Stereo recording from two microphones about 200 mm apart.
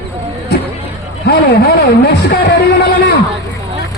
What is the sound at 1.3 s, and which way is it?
Speech, 50° left (ahead or behind).